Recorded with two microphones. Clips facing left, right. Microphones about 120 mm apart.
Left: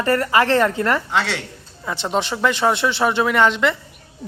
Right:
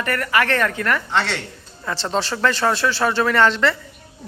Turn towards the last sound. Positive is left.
turn(degrees=15)  # may be behind; listen again after turning